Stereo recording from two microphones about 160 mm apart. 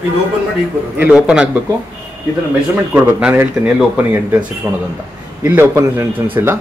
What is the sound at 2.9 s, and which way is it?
Speech, 10° right (ahead or behind).